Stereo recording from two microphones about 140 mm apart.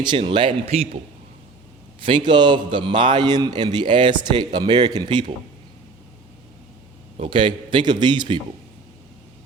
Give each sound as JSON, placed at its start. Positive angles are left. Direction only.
{"t": 0.0, "sound": "a man's voice", "side_deg": -35}
{"t": 2.0, "sound": "a man's voice", "side_deg": -35}
{"t": 7.2, "sound": "a man's voice", "side_deg": -40}